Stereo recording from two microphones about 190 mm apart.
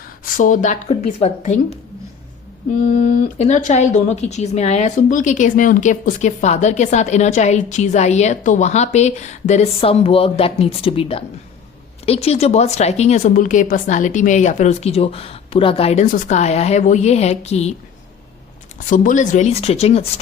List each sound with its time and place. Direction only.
0.3 s speech: 45° left (ahead or behind)
2.8 s speech: 40° left (ahead or behind)
18.9 s speech: 45° left (ahead or behind)